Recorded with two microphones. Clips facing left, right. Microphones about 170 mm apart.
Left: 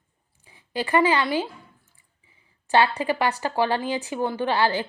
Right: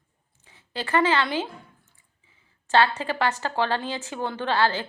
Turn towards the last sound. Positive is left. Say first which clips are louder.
# left 1 dB
turn(degrees=10)  # may be behind; listen again after turning